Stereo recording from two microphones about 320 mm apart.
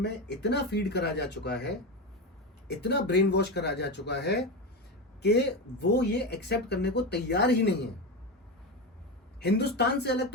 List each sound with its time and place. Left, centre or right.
0.0 s speech: left
9.4 s speech: left